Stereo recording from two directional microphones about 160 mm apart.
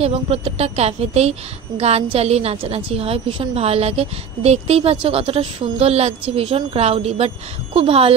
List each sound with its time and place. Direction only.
0.0 s a woman's voice: 35° right (ahead or behind)